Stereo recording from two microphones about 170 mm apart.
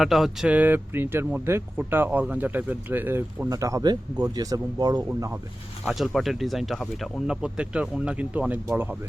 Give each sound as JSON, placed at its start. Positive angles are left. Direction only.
{"t": 0.0, "sound": "speech", "side_deg": 0}
{"t": 5.0, "sound": "speech", "side_deg": -10}
{"t": 5.8, "sound": "speech", "side_deg": 0}